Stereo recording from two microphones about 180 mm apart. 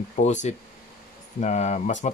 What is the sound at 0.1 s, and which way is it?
Speech, 40° left (ahead or behind).